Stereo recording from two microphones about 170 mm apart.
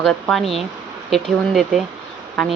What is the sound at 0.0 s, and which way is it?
Speech, centre (ahead or behind).